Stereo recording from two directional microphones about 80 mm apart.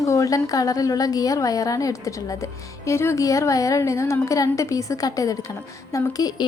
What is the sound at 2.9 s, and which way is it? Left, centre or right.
A woman's voice, left.